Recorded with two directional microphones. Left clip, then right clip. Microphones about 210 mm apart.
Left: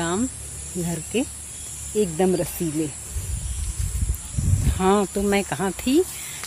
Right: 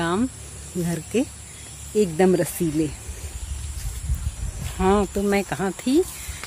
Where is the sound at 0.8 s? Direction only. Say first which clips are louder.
Right 2 dB; 10° right (ahead or behind).